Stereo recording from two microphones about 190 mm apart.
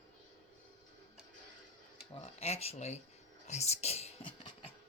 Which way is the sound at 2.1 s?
30° left (ahead or behind).